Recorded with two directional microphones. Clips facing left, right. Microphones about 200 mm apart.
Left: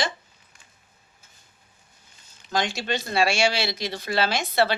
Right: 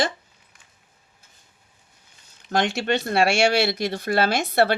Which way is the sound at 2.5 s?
65° right (ahead or behind).